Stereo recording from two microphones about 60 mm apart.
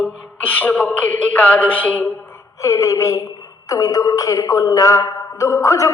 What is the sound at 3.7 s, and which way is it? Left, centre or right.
A man's voice, left.